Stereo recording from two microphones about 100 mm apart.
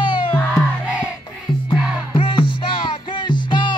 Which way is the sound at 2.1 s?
60° left (ahead or behind).